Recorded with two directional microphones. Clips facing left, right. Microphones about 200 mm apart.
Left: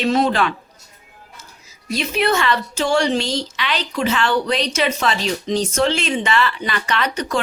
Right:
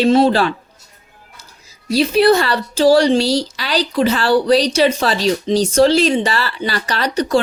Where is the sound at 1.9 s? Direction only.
35° right (ahead or behind).